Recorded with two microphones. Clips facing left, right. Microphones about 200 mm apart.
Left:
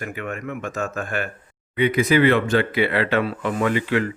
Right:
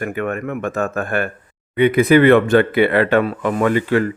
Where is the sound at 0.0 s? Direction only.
55° right (ahead or behind).